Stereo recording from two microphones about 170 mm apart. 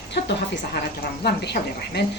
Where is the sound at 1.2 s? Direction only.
75° left (ahead or behind).